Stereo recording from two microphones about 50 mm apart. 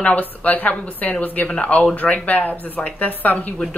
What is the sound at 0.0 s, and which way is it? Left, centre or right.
A woman's voice, left.